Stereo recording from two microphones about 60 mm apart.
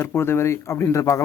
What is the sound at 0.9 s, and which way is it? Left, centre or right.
Speech, left.